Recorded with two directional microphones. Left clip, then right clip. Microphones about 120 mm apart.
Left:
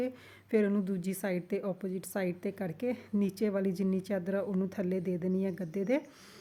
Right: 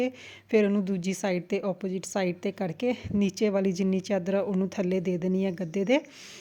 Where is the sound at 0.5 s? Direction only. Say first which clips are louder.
Right 6 dB; 20° right (ahead or behind).